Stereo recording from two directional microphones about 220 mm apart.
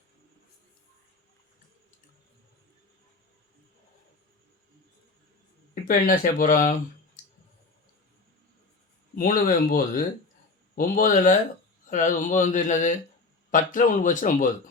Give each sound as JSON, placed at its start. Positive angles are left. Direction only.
{"t": 5.9, "sound": "speech", "side_deg": 40}
{"t": 7.2, "sound": "clicking", "side_deg": 35}
{"t": 9.1, "sound": "speech", "side_deg": 40}